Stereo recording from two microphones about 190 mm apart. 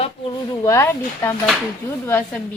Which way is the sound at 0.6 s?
15° left (ahead or behind).